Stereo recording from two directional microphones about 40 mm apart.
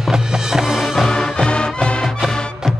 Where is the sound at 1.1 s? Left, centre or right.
Centre.